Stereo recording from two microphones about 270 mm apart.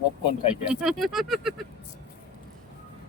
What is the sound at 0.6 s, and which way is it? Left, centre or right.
Speech, centre.